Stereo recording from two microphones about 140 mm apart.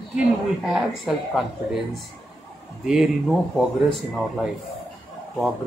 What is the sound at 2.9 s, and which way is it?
Speech, centre (ahead or behind).